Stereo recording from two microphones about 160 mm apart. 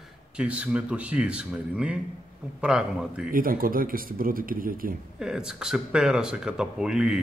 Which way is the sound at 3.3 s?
60° right (ahead or behind).